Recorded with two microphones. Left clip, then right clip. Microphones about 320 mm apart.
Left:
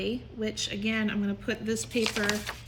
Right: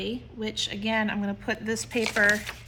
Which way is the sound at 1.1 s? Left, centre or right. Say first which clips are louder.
Right 2 dB; centre.